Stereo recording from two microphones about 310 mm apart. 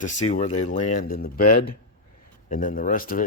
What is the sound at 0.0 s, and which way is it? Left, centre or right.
Speech, left.